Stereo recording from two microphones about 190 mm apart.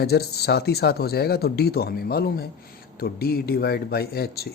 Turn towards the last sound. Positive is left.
turn(degrees=55)  # may be behind; listen again after turning